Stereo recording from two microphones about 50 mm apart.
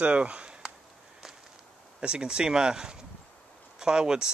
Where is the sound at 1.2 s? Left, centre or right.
Centre.